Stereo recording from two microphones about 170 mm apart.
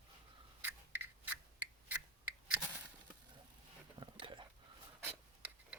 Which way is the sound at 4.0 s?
25° right (ahead or behind).